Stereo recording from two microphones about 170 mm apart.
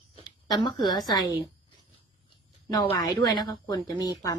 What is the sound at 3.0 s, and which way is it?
A woman's voice, 25° left (ahead or behind).